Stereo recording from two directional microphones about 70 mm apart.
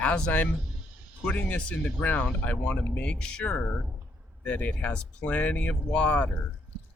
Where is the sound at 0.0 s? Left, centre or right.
Left.